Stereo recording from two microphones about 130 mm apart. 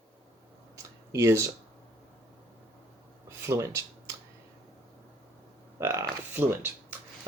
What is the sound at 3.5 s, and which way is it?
Speech, 25° right (ahead or behind).